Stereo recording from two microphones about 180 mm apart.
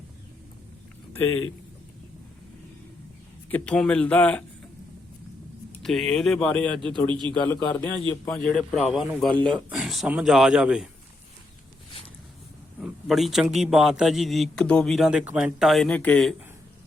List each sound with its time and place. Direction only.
3.5 s speech: 5° left (ahead or behind)
5.7 s a man's voice: centre (ahead or behind)
7.1 s a man's voice: 25° right (ahead or behind)
7.3 s speech: 10° left (ahead or behind)
8.3 s a man's voice: 5° left (ahead or behind)
12.8 s a man's voice: centre (ahead or behind)